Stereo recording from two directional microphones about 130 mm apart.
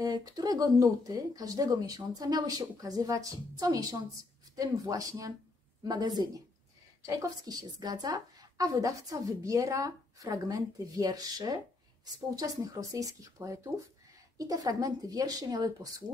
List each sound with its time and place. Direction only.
0.0 s a woman's voice: 30° right (ahead or behind)